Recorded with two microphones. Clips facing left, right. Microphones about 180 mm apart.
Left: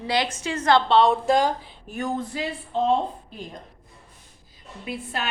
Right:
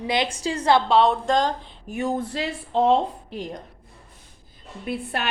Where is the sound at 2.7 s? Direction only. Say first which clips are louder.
Right 3 dB; 80° right.